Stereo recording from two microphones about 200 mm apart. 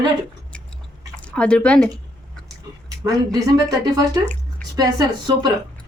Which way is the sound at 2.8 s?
15° right (ahead or behind).